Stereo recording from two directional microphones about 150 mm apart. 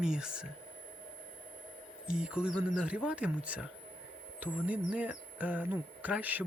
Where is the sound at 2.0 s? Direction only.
5° right (ahead or behind).